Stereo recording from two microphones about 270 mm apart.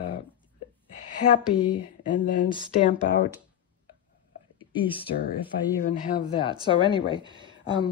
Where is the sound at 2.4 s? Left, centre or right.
Centre.